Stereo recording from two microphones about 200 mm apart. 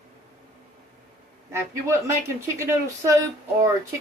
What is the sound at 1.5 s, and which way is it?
Speech, 15° right (ahead or behind).